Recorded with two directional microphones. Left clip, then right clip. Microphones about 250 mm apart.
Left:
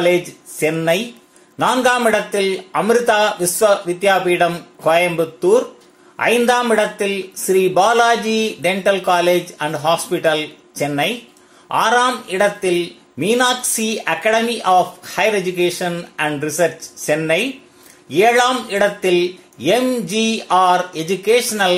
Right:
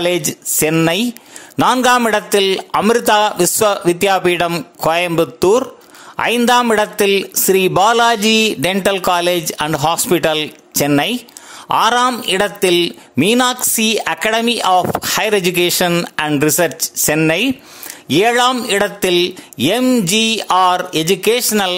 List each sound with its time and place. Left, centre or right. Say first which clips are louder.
0.0 s speech: left 1 dB; right